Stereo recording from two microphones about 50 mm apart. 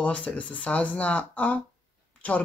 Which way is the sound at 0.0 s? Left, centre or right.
Left.